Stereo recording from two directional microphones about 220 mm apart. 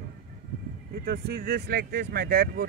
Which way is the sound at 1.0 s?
40° right (ahead or behind).